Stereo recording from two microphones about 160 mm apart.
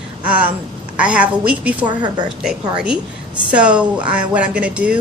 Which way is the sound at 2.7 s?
5° right (ahead or behind).